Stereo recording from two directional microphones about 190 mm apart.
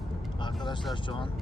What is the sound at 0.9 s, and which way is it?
Speech, 25° left (ahead or behind).